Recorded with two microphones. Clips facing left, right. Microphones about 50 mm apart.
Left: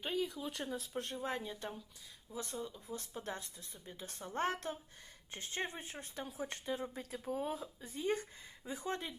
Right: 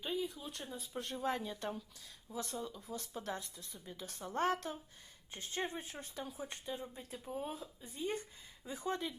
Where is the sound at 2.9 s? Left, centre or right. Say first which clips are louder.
Right 3 dB; left.